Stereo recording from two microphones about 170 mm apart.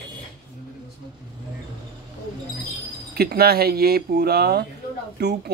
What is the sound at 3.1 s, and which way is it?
A man's voice, 65° right (ahead or behind).